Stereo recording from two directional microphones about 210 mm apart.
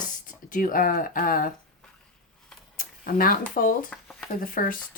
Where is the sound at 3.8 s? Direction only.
5° left (ahead or behind).